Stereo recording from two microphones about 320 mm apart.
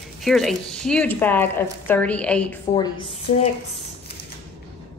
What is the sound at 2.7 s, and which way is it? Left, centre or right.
Speech, centre.